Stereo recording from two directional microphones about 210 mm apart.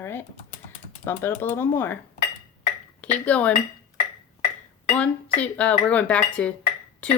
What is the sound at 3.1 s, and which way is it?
Speech, 5° left (ahead or behind).